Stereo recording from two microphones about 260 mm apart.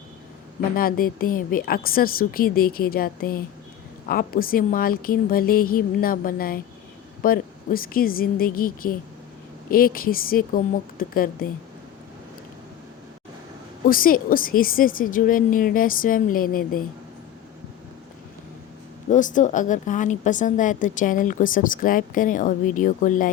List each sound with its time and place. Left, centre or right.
0.8 s a woman's voice: left
13.8 s a woman's voice: left
19.1 s a woman's voice: left